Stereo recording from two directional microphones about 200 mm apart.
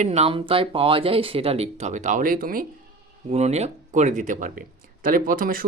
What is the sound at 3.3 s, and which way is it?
Speech, 35° right (ahead or behind).